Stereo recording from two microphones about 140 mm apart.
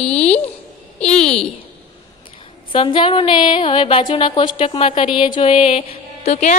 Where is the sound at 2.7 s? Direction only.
40° left (ahead or behind).